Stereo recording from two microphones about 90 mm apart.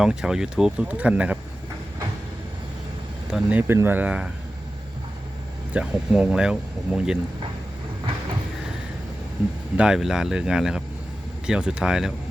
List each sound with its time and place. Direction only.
0.0 s speech: 5° right (ahead or behind)
3.5 s speech: 20° right (ahead or behind)
5.7 s speech: 10° right (ahead or behind)
9.7 s speech: 10° right (ahead or behind)